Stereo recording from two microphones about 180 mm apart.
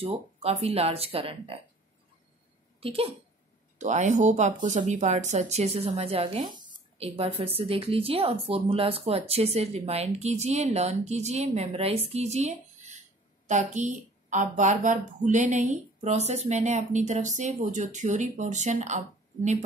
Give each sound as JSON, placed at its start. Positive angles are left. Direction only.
{"t": 0.0, "sound": "a woman's voice", "side_deg": -35}
{"t": 2.8, "sound": "speech", "side_deg": -30}
{"t": 3.7, "sound": "a woman's voice", "side_deg": -40}